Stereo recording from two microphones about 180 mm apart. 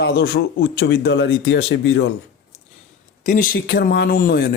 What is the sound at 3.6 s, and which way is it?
Speech, 65° left (ahead or behind).